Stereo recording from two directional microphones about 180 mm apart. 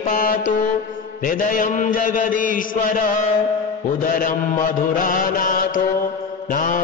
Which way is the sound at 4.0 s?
50° left (ahead or behind).